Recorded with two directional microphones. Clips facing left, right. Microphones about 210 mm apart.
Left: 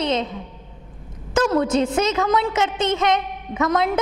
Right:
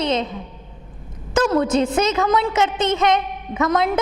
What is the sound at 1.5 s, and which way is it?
A woman's voice, 10° right (ahead or behind).